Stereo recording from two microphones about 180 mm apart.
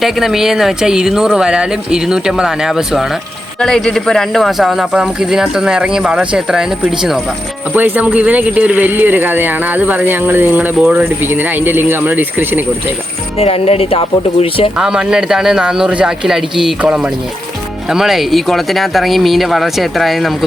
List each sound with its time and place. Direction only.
0.0 s speech: centre (ahead or behind)
13.3 s speech: 35° left (ahead or behind)
14.8 s speech: 5° right (ahead or behind)